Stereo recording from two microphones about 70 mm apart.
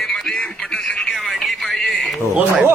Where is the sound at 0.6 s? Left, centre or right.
Centre.